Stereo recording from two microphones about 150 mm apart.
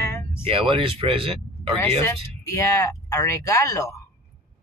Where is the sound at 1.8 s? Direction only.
15° left (ahead or behind).